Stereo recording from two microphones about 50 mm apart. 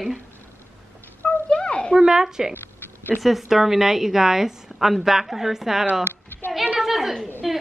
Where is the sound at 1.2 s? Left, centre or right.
Left.